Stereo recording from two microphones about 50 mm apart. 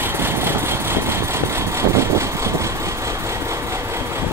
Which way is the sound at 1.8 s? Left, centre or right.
Right.